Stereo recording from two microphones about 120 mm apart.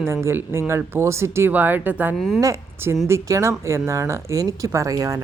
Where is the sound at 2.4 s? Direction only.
25° right (ahead or behind).